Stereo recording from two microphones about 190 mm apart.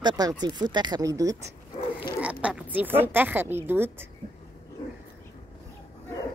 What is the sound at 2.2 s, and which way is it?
A woman's voice, 5° right (ahead or behind).